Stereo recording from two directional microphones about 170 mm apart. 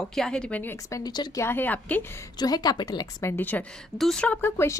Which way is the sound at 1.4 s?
10° left (ahead or behind).